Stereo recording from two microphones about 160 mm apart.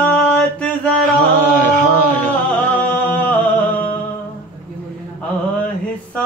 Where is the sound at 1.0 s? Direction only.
55° right (ahead or behind).